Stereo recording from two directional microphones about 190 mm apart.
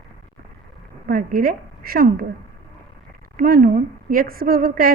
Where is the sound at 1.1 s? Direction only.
45° right (ahead or behind).